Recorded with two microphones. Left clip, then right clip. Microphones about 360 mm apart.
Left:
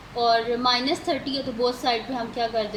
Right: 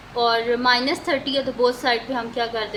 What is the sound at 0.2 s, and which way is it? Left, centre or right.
Speech, right.